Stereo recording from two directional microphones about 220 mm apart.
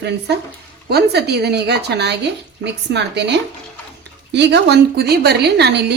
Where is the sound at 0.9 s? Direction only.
45° right (ahead or behind).